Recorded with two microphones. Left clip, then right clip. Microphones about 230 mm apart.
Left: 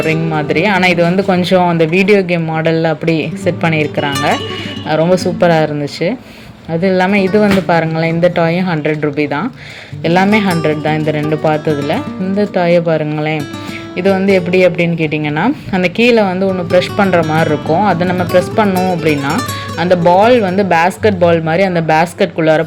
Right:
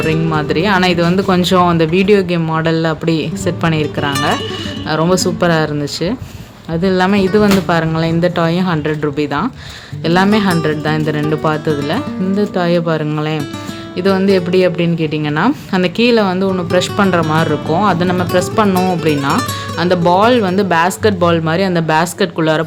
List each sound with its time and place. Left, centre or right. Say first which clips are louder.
0.0 s speech: left 1 dB; centre